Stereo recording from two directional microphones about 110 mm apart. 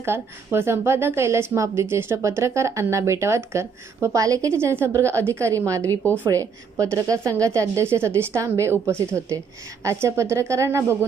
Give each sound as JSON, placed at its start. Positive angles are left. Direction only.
{"t": 0.0, "sound": "a woman's voice", "side_deg": -20}
{"t": 5.9, "sound": "speech", "side_deg": 15}
{"t": 6.3, "sound": "a woman's voice", "side_deg": -30}